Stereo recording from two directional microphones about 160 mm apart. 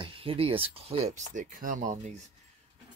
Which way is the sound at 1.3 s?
60° right (ahead or behind).